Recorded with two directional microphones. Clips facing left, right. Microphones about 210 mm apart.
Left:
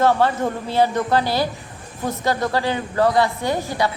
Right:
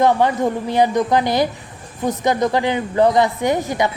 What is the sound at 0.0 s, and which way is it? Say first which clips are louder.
A woman's voice: right 2 dB; 15° right (ahead or behind).